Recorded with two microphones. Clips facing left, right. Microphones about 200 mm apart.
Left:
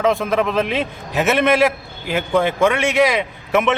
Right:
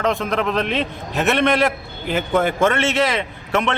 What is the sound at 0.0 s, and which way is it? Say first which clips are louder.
A man's voice: left 3 dB; centre (ahead or behind).